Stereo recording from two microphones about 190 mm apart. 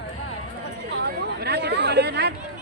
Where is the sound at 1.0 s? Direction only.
60° right (ahead or behind).